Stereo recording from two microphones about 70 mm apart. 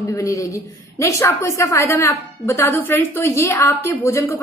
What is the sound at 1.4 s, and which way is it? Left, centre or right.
A woman's voice, left.